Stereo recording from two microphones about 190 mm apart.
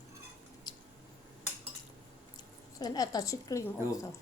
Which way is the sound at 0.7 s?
25° left (ahead or behind).